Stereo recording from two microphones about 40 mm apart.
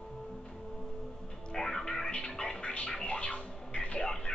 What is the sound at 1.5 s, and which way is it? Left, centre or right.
Music, centre.